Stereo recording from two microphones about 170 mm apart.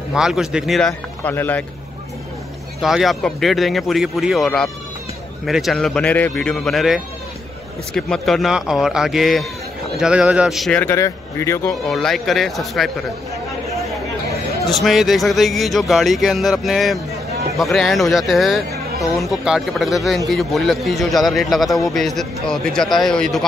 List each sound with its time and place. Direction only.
0.1 s a man's voice: 5° right (ahead or behind)
2.8 s a man's voice: centre (ahead or behind)
10.8 s speech: 15° left (ahead or behind)
11.9 s a man's voice: centre (ahead or behind)
14.7 s a man's voice: centre (ahead or behind)